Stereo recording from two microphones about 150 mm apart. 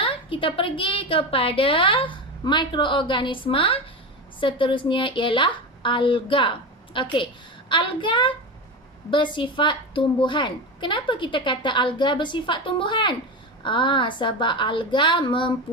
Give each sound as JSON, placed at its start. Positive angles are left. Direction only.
{"t": 0.0, "sound": "a woman's voice", "side_deg": 35}